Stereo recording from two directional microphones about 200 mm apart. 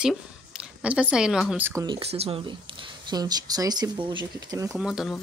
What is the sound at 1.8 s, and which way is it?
Speech, 25° right (ahead or behind).